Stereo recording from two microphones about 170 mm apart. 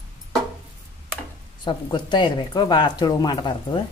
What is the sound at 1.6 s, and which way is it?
Speech, 25° left (ahead or behind).